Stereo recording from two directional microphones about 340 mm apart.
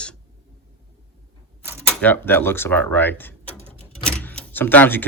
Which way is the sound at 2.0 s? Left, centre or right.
Centre.